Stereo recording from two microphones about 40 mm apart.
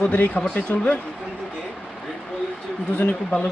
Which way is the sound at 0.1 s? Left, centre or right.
Left.